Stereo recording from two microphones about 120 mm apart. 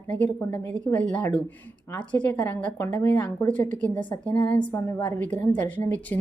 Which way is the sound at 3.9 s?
40° left (ahead or behind).